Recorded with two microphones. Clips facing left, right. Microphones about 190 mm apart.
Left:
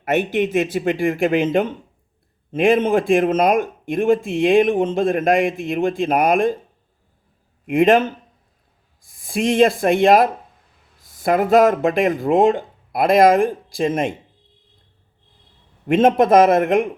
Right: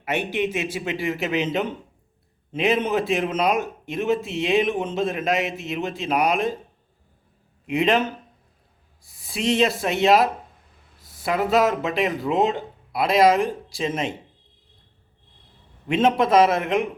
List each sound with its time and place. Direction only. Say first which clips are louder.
0.0 s speech: left 6 dB; 50° left (ahead or behind)
7.7 s speech: left 6 dB; 50° left (ahead or behind)
15.9 s speech: left 5 dB; 50° left (ahead or behind)